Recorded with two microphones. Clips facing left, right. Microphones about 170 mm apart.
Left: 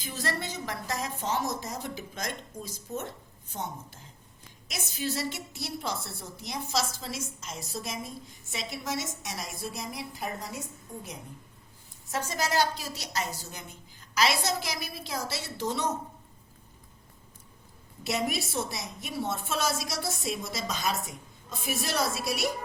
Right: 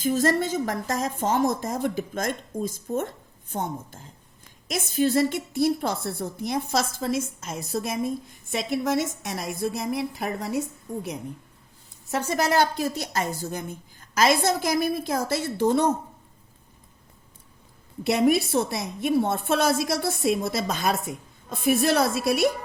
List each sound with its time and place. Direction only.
0.0 s a woman's voice: 45° right (ahead or behind); by 10.6 s 65° right (ahead or behind)
12.1 s a woman's voice: 60° right (ahead or behind)
18.0 s a woman's voice: 55° right (ahead or behind)